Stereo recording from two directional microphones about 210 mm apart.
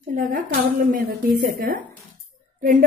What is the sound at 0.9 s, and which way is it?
A woman's voice, 45° right (ahead or behind).